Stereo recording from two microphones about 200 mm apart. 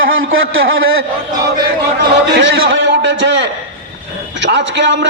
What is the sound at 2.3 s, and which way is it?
A man's voice, 60° right (ahead or behind).